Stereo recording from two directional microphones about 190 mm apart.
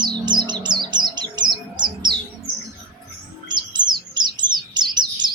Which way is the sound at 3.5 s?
25° right (ahead or behind).